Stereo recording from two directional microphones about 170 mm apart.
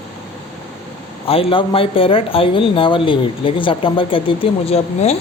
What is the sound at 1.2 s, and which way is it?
Speech, 35° left (ahead or behind).